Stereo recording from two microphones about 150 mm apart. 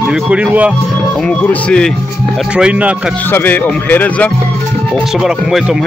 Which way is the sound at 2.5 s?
5° right (ahead or behind).